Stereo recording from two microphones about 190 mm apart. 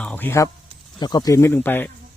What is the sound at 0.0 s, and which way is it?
Speech, 10° left (ahead or behind).